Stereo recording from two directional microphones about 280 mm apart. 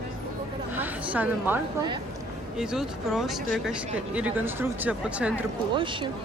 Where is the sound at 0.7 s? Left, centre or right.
Centre.